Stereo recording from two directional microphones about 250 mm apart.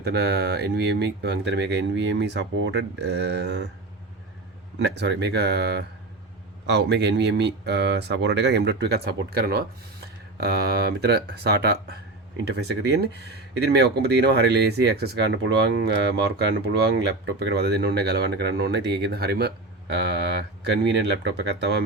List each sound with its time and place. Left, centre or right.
0.0 s speech: right
4.8 s speech: right
17.4 s speech: right